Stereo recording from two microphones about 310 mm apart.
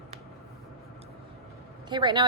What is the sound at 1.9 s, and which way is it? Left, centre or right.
Speech, centre.